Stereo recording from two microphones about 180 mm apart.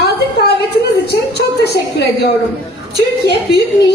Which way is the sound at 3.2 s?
65° left (ahead or behind).